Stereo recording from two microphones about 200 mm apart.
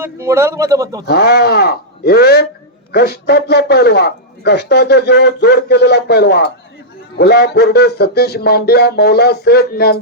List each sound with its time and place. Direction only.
0.0 s a man's voice: 15° right (ahead or behind)
1.0 s a man's voice: 55° left (ahead or behind)